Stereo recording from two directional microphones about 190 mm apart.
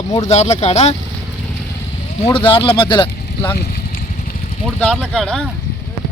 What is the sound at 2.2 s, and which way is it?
Speech, 30° left (ahead or behind).